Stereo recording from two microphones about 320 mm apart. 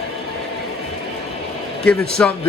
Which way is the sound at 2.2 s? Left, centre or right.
Centre.